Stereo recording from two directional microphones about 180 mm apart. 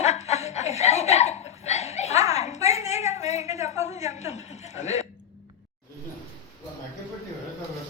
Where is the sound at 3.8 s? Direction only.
40° left (ahead or behind).